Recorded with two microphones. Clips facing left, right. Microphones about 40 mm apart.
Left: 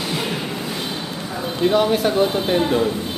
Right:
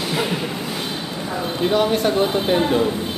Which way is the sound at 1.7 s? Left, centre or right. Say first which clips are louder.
Left 1 dB; centre.